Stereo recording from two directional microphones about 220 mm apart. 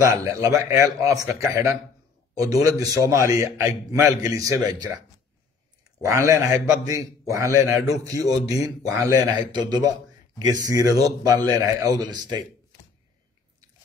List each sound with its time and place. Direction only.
0.0 s a man's voice: 15° right (ahead or behind)
6.0 s a man's voice: 15° right (ahead or behind)